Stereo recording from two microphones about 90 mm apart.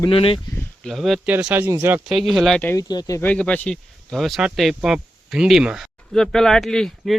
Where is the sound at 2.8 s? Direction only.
45° left (ahead or behind).